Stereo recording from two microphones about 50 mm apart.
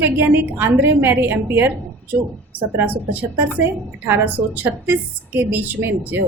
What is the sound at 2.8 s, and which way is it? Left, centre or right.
A woman's voice, right.